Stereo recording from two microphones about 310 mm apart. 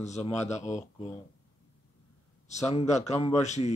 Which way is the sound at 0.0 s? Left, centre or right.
Left.